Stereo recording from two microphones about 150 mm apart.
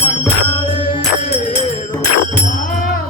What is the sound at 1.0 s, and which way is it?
Music, 50° left (ahead or behind).